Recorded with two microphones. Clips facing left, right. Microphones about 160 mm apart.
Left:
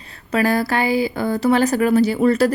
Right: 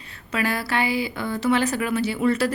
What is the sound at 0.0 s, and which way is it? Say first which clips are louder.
Speech: left 7 dB; 35° left (ahead or behind).